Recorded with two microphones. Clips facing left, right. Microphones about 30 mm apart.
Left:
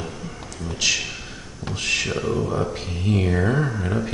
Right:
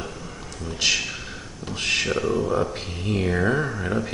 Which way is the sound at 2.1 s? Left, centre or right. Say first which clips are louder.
Right 1 dB; centre.